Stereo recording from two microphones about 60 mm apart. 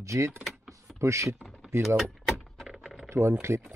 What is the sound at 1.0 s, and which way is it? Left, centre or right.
Speech, right.